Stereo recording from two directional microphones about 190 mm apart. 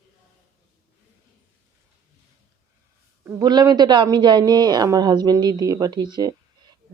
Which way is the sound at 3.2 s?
20° right (ahead or behind).